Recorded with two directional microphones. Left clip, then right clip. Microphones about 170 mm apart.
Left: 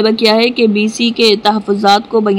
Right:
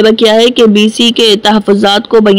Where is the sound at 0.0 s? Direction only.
25° right (ahead or behind).